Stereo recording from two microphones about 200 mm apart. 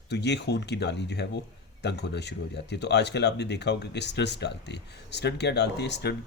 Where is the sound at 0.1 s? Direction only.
60° left (ahead or behind).